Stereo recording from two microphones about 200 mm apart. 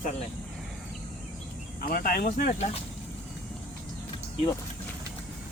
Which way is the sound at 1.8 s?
50° left (ahead or behind).